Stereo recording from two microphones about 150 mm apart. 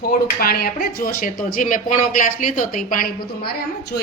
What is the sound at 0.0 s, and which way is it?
Speech, 75° left (ahead or behind).